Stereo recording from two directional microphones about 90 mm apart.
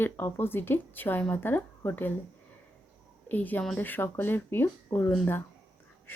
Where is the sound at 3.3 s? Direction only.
20° left (ahead or behind).